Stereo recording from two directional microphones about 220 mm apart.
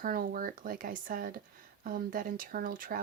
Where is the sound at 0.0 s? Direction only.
40° right (ahead or behind).